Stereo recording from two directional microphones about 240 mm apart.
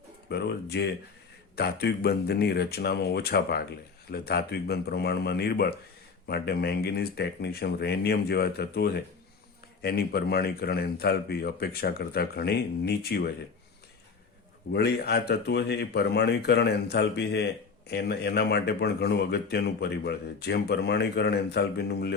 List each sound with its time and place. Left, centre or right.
0.3 s speech: left
14.7 s speech: left